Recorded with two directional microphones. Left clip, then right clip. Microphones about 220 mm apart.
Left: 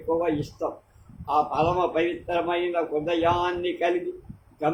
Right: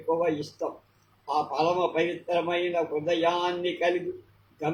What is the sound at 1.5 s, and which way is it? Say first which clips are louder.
A man's voice: left 2 dB; 20° left (ahead or behind).